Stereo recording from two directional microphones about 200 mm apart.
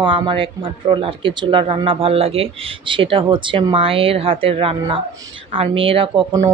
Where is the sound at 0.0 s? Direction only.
25° right (ahead or behind).